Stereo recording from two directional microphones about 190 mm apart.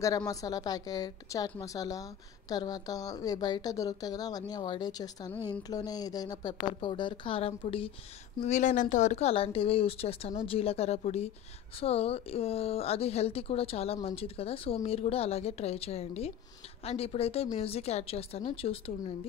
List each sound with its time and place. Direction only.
0.3 s a woman's voice: 20° left (ahead or behind)